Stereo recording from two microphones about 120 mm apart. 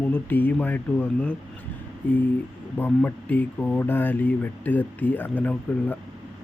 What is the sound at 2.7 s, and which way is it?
Speech, 15° left (ahead or behind).